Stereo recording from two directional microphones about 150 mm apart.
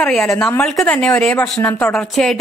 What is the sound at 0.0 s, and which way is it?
Speech, 5° left (ahead or behind).